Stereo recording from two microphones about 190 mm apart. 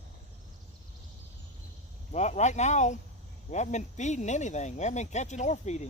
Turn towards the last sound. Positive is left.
turn(degrees=35)  # may be behind; listen again after turning